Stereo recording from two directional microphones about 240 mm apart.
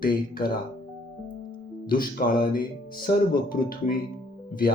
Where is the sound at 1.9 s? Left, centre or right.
Left.